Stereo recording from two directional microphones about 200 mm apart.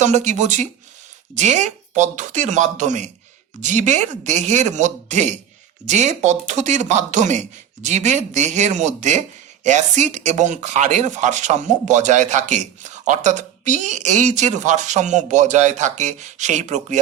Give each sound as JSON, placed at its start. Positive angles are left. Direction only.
{"t": 0.0, "sound": "speech", "side_deg": -35}